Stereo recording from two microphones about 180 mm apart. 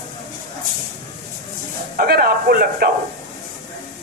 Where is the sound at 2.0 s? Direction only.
55° right (ahead or behind).